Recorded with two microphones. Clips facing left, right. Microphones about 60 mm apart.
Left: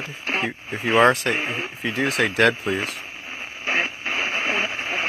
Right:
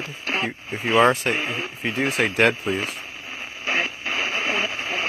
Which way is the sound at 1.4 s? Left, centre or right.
Centre.